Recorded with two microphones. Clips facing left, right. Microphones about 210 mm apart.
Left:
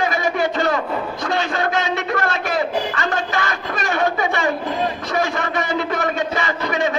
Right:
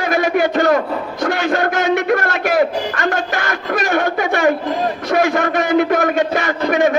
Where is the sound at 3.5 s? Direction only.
60° right (ahead or behind).